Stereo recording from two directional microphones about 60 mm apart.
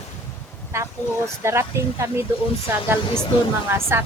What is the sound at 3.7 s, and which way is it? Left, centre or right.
Speech, right.